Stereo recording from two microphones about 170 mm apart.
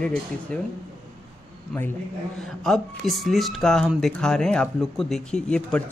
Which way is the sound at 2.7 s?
Centre (ahead or behind).